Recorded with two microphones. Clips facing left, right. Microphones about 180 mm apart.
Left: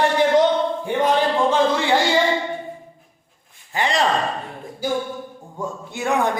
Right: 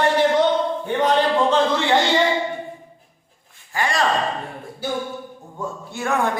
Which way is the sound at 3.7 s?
20° left (ahead or behind).